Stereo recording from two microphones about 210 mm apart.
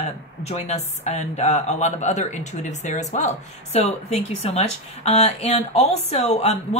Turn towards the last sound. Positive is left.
turn(degrees=30)  # may be behind; listen again after turning